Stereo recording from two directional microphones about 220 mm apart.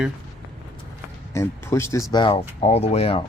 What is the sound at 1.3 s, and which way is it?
Speech, 10° left (ahead or behind).